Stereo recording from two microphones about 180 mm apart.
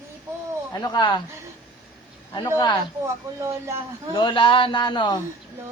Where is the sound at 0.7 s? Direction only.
20° left (ahead or behind).